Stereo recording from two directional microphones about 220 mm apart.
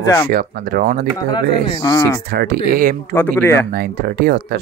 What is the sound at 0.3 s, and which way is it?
Speech, 40° right (ahead or behind).